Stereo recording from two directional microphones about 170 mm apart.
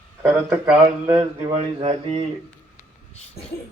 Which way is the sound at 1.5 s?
40° right (ahead or behind).